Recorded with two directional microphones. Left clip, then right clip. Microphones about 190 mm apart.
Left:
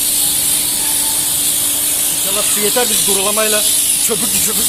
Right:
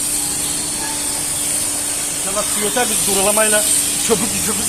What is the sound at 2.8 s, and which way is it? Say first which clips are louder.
Speech: right 2 dB; 45° left (ahead or behind).